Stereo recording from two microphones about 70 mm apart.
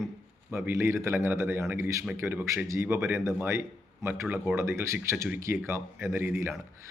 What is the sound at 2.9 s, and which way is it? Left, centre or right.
A man's voice, right.